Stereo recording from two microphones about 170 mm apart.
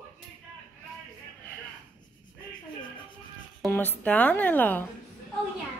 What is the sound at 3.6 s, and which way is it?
Speech, 10° left (ahead or behind).